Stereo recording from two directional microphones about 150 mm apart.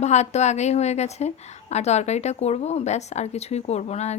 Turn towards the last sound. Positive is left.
turn(degrees=45)  # may be behind; listen again after turning